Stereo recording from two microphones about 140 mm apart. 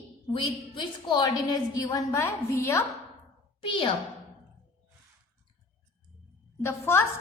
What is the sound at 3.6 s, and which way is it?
Speech, 40° left (ahead or behind).